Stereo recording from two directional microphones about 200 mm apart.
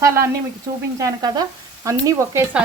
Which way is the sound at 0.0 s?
15° right (ahead or behind).